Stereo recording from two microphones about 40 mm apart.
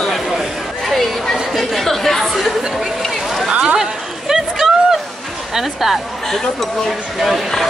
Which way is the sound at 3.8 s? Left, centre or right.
Centre.